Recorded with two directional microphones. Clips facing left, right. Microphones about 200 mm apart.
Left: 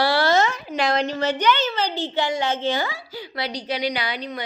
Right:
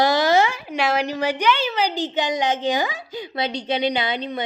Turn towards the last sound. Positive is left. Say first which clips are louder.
# right 4 dB
turn(degrees=-25)  # may be behind; listen again after turning